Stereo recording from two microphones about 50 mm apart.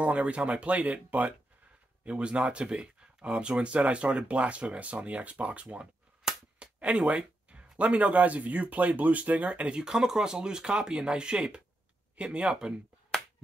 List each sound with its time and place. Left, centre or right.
0.0 s speech: right
2.0 s speech: right
13.1 s finger snapping: centre